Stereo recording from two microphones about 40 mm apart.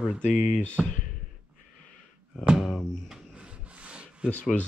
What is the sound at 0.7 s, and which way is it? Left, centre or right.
Speech, left.